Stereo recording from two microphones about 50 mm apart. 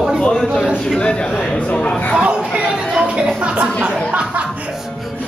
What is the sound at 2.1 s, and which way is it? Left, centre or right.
Speech, centre.